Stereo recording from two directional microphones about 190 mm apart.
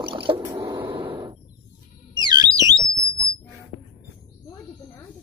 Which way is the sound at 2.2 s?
20° right (ahead or behind).